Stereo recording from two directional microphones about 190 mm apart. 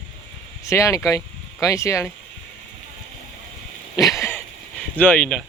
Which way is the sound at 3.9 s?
15° left (ahead or behind).